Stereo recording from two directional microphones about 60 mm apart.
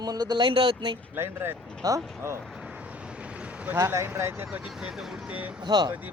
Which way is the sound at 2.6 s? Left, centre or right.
Right.